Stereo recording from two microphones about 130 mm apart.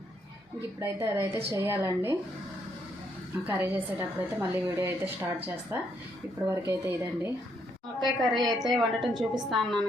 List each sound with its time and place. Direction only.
0.8 s speech: 20° right (ahead or behind)
3.4 s a woman's voice: 15° right (ahead or behind)
8.0 s a woman's voice: centre (ahead or behind)